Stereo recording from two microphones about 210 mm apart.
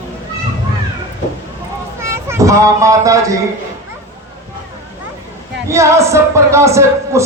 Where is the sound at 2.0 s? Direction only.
15° right (ahead or behind).